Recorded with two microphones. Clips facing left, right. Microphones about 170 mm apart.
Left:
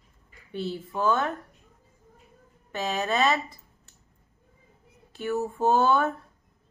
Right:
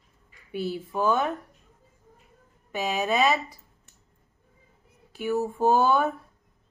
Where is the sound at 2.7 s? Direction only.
10° right (ahead or behind).